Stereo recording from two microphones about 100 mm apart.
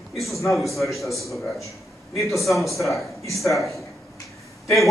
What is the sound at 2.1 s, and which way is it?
Speech, 30° left (ahead or behind).